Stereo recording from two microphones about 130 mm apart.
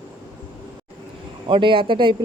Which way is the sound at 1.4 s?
40° right (ahead or behind).